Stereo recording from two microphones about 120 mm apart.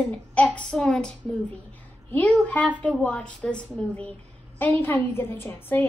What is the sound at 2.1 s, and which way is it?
A woman's voice, 15° left (ahead or behind).